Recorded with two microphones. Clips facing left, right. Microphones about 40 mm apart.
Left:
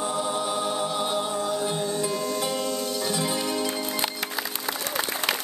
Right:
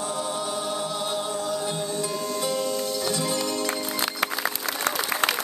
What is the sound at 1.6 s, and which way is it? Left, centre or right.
Music, centre.